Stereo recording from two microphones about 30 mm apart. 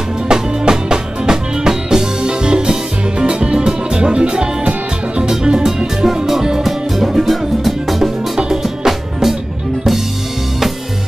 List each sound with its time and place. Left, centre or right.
0.3 s music: right
6.6 s music: centre